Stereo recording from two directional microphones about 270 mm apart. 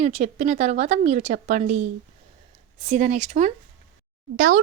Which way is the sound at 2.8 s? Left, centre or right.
Right.